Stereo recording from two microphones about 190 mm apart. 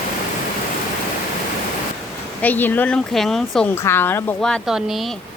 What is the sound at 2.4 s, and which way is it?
Speech, 10° left (ahead or behind).